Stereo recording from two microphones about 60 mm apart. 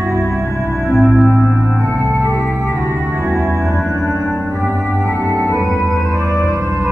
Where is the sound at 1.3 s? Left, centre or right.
Right.